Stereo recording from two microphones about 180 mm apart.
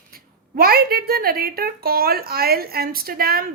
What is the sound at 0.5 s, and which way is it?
A woman's voice, 55° right (ahead or behind).